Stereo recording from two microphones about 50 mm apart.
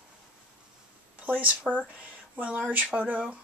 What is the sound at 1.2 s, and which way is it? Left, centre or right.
Speech, right.